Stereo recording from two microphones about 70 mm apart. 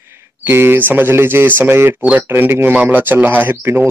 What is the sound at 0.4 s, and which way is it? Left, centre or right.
A man's voice, right.